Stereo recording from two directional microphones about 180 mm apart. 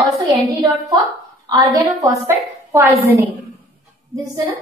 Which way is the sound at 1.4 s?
20° right (ahead or behind).